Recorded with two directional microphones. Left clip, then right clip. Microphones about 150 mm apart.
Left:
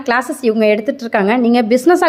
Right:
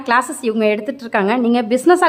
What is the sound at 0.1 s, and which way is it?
A woman's voice, 5° left (ahead or behind).